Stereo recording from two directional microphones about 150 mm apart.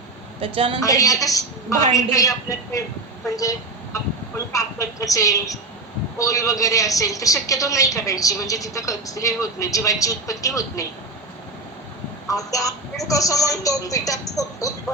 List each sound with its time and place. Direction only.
0.3 s a woman's voice: 40° right (ahead or behind)
0.8 s a woman's voice: 20° left (ahead or behind)
3.9 s a woman's voice: 20° left (ahead or behind)
12.3 s a woman's voice: 20° left (ahead or behind)